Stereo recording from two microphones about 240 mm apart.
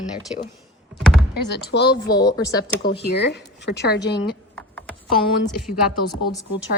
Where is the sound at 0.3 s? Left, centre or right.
Left.